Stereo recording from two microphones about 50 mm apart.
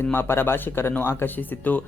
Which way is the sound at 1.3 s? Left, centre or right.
Left.